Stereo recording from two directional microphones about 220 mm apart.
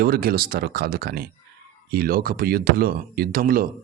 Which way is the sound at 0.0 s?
40° right (ahead or behind).